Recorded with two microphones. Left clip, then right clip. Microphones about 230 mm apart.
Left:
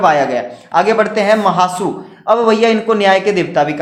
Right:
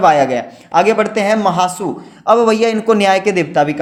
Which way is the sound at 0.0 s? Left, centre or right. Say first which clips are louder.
Right 1 dB; right.